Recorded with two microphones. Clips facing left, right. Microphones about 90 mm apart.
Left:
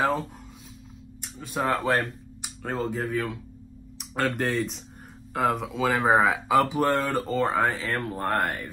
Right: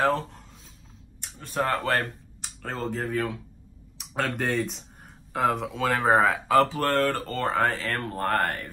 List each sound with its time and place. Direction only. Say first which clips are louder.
1.5 s speech: even; 15° left (ahead or behind)
1.9 s a sound: left 1 dB; 15° left (ahead or behind)
2.6 s speech: left 2 dB; 5° left (ahead or behind)